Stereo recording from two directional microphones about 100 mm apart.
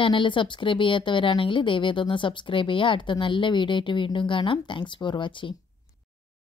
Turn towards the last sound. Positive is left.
turn(degrees=55)  # may be behind; listen again after turning